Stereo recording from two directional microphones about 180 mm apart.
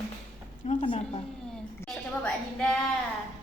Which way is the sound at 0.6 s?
40° left (ahead or behind).